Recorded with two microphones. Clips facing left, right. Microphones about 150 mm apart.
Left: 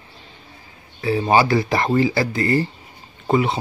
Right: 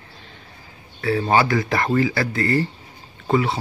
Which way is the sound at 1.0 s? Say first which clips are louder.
Left 2 dB; 20° left (ahead or behind).